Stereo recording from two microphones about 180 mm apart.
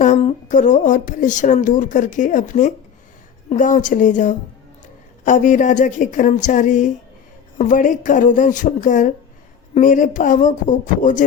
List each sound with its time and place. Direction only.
0.0 s speech: 40° left (ahead or behind)